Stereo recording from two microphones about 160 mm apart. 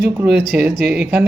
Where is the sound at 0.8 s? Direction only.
90° right.